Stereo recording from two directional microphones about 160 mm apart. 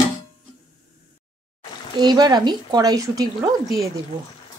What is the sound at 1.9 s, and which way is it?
Speech, 25° right (ahead or behind).